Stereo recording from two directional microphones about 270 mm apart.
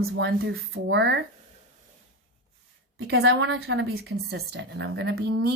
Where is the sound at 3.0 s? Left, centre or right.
Right.